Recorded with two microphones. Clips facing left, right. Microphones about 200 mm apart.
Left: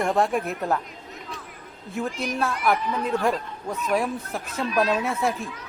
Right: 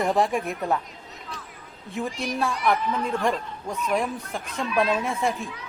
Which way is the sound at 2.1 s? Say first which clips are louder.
Left 1 dB; 50° left (ahead or behind).